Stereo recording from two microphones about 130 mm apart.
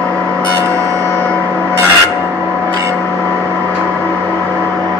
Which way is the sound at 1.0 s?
15° left (ahead or behind).